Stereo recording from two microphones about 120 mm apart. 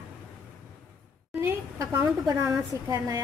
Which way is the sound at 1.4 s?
25° right (ahead or behind).